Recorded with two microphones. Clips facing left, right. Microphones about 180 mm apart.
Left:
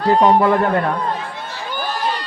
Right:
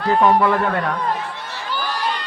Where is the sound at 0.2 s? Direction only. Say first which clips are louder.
Even; 20° left (ahead or behind).